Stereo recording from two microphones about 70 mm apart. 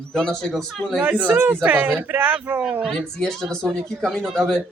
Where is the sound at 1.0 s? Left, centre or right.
Centre.